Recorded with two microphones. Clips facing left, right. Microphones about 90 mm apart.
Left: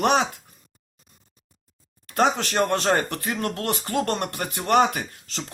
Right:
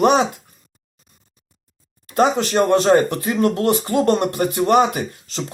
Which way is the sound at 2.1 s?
15° right (ahead or behind).